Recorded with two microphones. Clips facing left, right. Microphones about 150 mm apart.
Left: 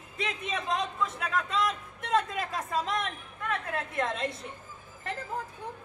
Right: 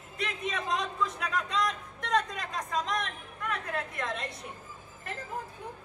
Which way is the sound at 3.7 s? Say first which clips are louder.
Left 3 dB; 25° left (ahead or behind).